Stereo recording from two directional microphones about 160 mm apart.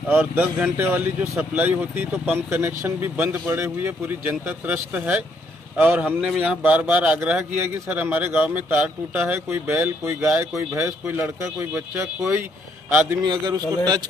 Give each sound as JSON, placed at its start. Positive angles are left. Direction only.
{"t": 0.3, "sound": "speech", "side_deg": -10}
{"t": 13.2, "sound": "speech", "side_deg": -30}